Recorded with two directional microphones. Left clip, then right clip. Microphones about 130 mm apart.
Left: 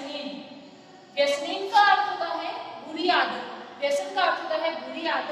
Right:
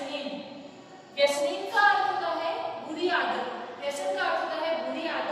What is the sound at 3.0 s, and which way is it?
A woman's voice, 35° left (ahead or behind).